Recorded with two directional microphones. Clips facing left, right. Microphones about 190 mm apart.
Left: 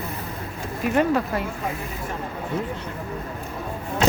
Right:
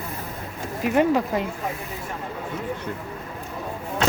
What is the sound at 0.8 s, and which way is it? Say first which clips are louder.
Speech: right 1 dB; 15° right (ahead or behind).